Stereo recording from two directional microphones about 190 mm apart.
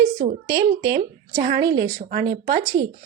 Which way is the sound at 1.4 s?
55° right (ahead or behind).